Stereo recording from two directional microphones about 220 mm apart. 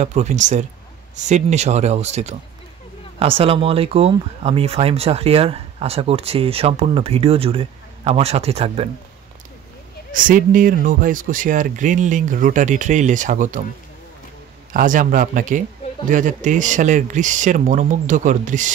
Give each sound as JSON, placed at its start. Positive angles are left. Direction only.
{"t": 0.0, "sound": "speech", "side_deg": -30}
{"t": 10.1, "sound": "speech", "side_deg": -35}
{"t": 14.7, "sound": "speech", "side_deg": -35}